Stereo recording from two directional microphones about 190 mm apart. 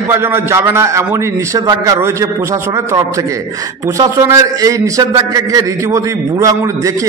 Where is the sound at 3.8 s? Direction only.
15° right (ahead or behind).